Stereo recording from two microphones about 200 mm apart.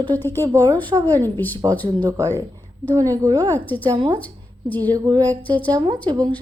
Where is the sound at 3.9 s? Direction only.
20° right (ahead or behind).